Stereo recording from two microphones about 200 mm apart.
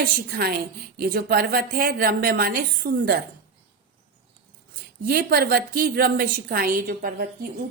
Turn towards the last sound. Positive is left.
turn(degrees=-45)  # may be behind; listen again after turning